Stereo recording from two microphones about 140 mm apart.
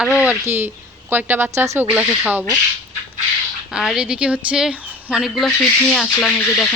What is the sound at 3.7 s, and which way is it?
Speech, 5° right (ahead or behind).